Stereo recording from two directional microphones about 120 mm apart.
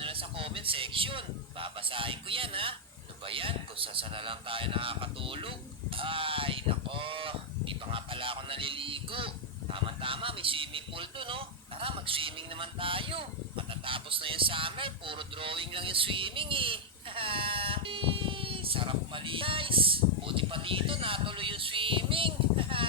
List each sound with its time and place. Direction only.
0.0 s speech: 50° right (ahead or behind)